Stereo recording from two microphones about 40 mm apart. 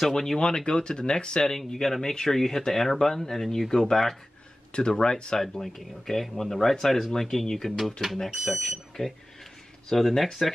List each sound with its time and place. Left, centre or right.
0.1 s speech: centre
0.4 s speech: left
1.6 s speech: centre
4.7 s speech: left
5.4 s speech: centre